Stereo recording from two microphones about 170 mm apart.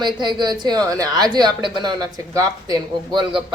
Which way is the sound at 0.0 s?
25° right (ahead or behind).